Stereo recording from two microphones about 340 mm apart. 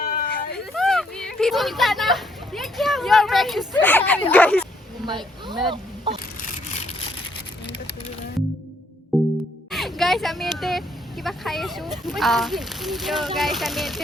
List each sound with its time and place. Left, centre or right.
0.0 s a sound: left
0.7 s a sound: centre
4.3 s speech: centre
5.0 s speech: centre
9.1 s music: centre
9.7 s speech: centre